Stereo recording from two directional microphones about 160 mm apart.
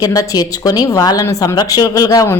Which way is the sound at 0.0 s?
20° left (ahead or behind).